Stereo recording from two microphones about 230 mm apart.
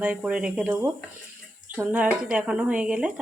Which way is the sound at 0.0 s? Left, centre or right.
Centre.